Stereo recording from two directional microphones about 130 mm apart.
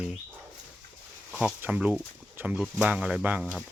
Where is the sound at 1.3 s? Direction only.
5° right (ahead or behind).